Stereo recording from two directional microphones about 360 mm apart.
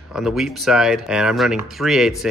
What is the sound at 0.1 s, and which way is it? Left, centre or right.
Speech, centre.